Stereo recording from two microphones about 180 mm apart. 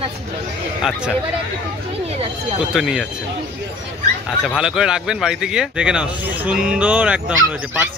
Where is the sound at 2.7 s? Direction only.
5° right (ahead or behind).